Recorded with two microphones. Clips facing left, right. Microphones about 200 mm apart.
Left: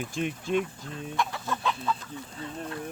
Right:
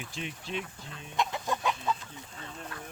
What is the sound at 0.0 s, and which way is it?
Speech, 50° left (ahead or behind).